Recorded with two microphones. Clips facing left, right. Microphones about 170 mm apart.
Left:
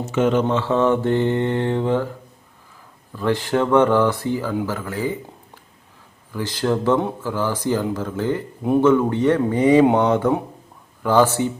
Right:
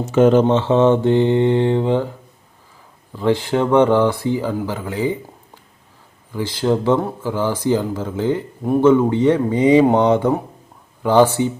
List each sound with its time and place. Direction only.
0.1 s speech: 35° right (ahead or behind)
0.4 s mantra: 25° right (ahead or behind)
3.1 s speech: 15° right (ahead or behind)
6.3 s speech: 10° right (ahead or behind)